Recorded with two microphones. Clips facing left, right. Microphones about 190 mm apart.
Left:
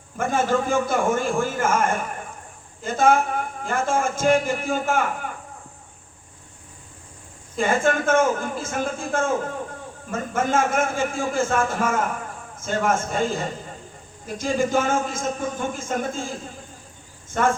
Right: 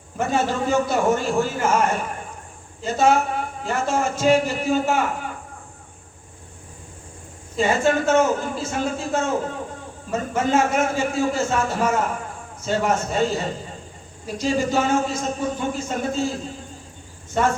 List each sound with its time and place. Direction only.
0.2 s a man's voice: 50° left (ahead or behind)
7.5 s a man's voice: 50° left (ahead or behind)